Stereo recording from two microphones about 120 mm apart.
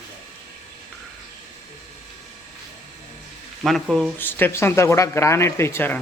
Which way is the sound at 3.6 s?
Centre (ahead or behind).